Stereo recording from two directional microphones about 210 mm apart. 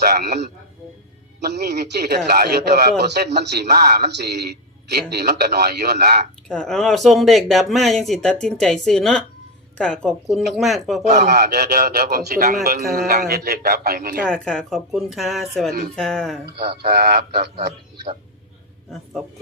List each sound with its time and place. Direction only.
0.0 s a man's voice: 50° right (ahead or behind)
6.5 s speech: 5° left (ahead or behind)
11.1 s a man's voice: 50° right (ahead or behind)
14.3 s speech: 5° left (ahead or behind)
16.5 s a man's voice: 50° right (ahead or behind)